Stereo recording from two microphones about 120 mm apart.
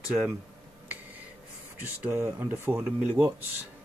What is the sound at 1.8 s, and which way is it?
Speech, 20° right (ahead or behind).